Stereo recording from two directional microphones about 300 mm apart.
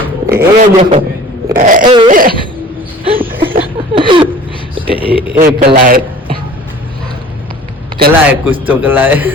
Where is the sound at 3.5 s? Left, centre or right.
Centre.